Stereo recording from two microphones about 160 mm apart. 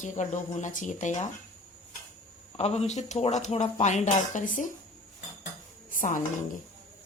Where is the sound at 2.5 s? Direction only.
40° left (ahead or behind).